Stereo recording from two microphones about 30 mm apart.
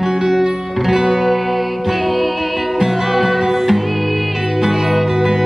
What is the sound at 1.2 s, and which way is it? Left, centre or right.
Music, centre.